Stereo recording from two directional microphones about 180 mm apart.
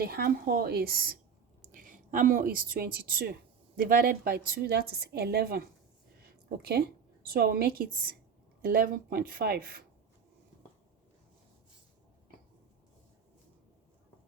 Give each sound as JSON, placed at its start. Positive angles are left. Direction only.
{"t": 0.0, "sound": "a woman's voice", "side_deg": -55}
{"t": 1.7, "sound": "a woman's voice", "side_deg": -45}